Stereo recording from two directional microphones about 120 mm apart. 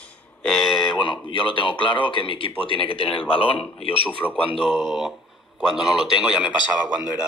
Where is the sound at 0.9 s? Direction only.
45° left (ahead or behind).